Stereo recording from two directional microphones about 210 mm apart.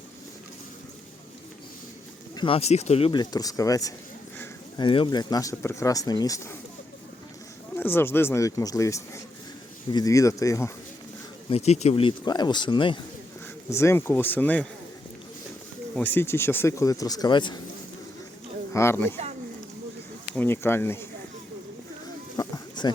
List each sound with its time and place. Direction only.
2.3 s speech: 25° left (ahead or behind)
7.8 s speech: 10° left (ahead or behind)
11.4 s speech: 30° left (ahead or behind)
13.7 s speech: 15° left (ahead or behind)
16.0 s speech: 10° left (ahead or behind)
18.7 s speech: 10° left (ahead or behind)
20.3 s speech: 10° left (ahead or behind)
22.4 s a sound: 20° left (ahead or behind)